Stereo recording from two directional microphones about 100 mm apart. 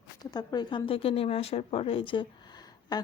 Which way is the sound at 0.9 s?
70° left (ahead or behind).